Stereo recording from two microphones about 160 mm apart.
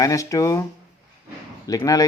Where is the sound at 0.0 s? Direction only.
20° left (ahead or behind).